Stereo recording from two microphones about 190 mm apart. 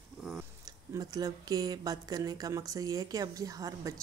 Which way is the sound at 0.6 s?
20° right (ahead or behind).